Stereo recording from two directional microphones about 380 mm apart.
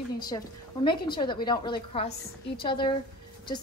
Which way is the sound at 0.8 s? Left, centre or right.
Centre.